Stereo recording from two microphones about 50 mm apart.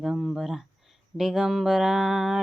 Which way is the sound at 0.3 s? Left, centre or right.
Centre.